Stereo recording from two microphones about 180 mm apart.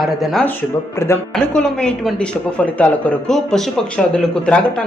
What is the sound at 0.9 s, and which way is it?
Speech, 15° left (ahead or behind).